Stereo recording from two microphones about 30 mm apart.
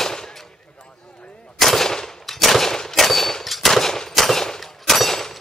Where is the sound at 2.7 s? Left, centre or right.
Centre.